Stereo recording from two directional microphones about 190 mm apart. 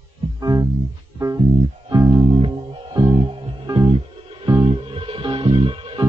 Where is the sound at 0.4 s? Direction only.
20° right (ahead or behind).